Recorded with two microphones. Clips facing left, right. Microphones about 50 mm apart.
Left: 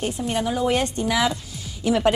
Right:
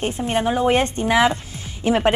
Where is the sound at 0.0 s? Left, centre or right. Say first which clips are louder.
Right 3 dB; right.